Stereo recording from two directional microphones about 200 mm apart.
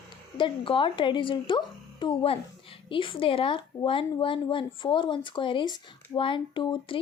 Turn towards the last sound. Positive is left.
turn(degrees=25)  # may be behind; listen again after turning